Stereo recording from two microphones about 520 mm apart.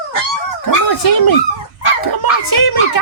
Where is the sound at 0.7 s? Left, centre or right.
Left.